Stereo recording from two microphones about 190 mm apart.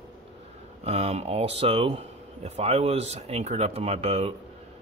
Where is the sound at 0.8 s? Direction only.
35° right (ahead or behind).